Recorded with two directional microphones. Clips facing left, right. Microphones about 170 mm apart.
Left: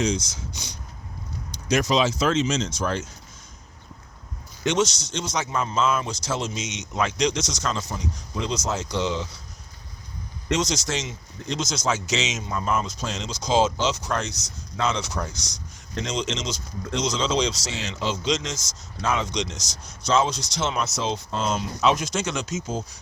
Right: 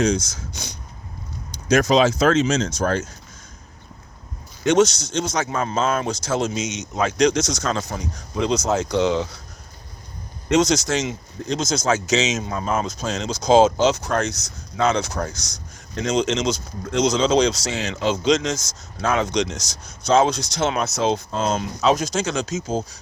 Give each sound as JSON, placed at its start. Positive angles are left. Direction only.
{"t": 0.0, "sound": "speech", "side_deg": -45}
{"t": 4.6, "sound": "speech", "side_deg": -50}
{"t": 10.5, "sound": "speech", "side_deg": -55}